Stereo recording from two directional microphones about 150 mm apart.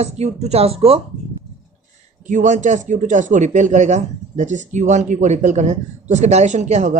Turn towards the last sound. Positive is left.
turn(degrees=-50)  # may be behind; listen again after turning